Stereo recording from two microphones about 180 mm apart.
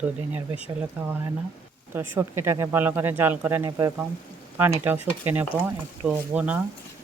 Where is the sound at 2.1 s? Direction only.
15° right (ahead or behind).